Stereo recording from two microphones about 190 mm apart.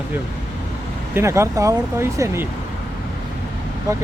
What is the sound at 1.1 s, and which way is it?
Speech, 15° right (ahead or behind).